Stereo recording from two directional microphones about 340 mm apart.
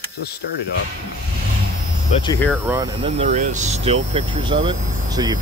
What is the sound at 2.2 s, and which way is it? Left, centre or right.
Speech, centre.